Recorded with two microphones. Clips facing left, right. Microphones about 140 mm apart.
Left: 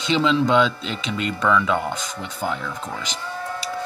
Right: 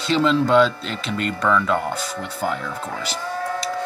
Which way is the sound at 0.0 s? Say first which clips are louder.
Right 1 dB; centre (ahead or behind).